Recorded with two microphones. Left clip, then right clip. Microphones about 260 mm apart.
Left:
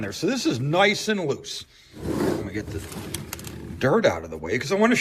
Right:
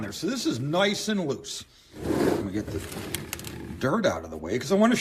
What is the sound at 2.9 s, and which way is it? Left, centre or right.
A man's voice, centre.